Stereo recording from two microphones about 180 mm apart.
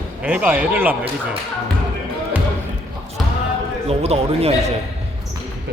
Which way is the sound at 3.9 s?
35° right (ahead or behind).